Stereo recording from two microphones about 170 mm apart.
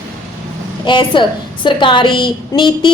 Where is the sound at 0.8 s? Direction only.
30° left (ahead or behind).